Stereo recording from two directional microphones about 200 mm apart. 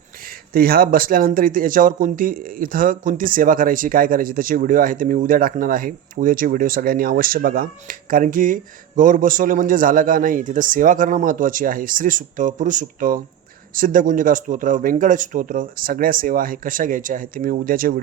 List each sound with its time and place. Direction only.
0.3 s a man's voice: 50° right (ahead or behind)